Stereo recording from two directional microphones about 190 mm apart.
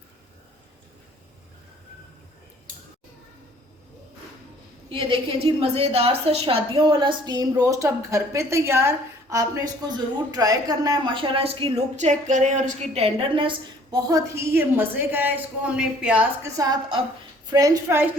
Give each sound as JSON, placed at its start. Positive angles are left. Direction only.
{"t": 4.9, "sound": "a woman's voice", "side_deg": -25}
{"t": 13.9, "sound": "a woman's voice", "side_deg": -15}
{"t": 16.6, "sound": "a woman's voice", "side_deg": -20}